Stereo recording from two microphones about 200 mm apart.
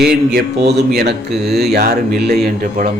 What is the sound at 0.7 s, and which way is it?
A man's voice, 55° right (ahead or behind).